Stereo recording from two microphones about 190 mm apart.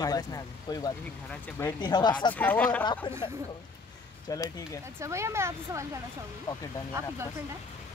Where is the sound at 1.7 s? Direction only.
25° left (ahead or behind).